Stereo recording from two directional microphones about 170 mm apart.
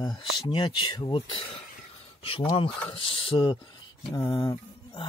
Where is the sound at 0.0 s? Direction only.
25° left (ahead or behind).